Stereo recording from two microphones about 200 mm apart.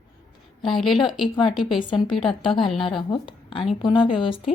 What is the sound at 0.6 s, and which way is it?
A woman's voice, centre (ahead or behind).